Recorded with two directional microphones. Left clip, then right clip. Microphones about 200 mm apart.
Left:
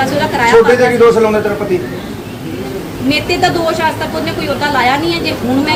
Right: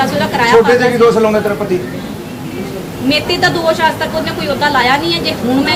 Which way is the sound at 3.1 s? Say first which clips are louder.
Even; 15° left (ahead or behind).